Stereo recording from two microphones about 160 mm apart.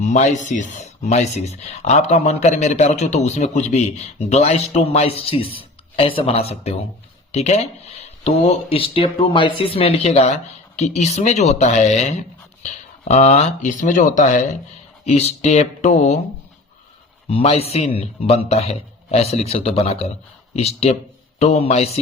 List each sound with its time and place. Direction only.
0.0 s speech: 45° left (ahead or behind)
15.0 s speech: 40° left (ahead or behind)
17.2 s speech: 40° left (ahead or behind)